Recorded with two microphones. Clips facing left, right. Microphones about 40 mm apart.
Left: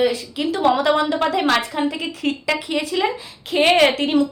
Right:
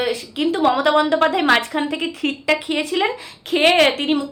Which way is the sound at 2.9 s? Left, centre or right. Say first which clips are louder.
Right 1 dB; right.